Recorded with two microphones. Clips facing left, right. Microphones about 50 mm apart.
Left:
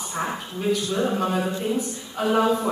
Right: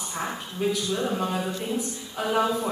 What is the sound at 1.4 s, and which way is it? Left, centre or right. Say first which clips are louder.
A woman's voice: left 4 dB; left.